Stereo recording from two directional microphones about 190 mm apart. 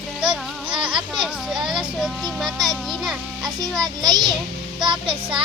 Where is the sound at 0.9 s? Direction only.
5° right (ahead or behind).